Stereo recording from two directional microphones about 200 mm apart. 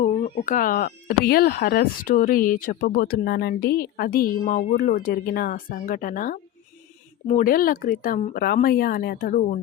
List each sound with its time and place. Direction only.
0.0 s speech: 40° left (ahead or behind)